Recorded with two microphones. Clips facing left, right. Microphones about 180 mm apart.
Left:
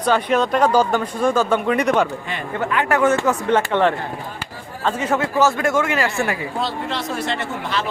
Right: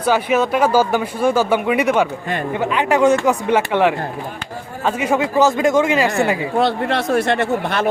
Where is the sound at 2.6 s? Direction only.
20° right (ahead or behind).